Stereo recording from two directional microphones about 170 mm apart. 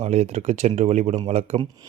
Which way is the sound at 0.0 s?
40° right (ahead or behind).